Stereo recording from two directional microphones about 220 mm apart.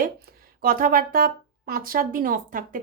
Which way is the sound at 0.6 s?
40° right (ahead or behind).